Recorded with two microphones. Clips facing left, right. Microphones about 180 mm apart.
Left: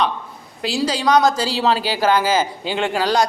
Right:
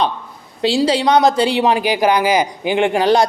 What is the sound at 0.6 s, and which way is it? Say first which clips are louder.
A man's voice: right 5 dB; 25° right (ahead or behind).